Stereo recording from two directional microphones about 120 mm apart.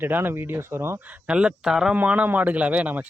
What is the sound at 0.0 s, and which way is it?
Speech, 15° right (ahead or behind).